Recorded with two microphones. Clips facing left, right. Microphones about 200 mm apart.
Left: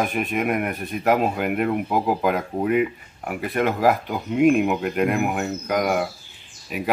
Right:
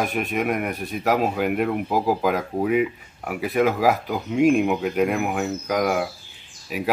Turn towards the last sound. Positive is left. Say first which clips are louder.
# right 1 dB
turn(degrees=0)  # may be behind; listen again after turning